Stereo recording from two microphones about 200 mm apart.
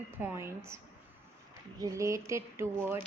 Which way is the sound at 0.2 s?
10° right (ahead or behind).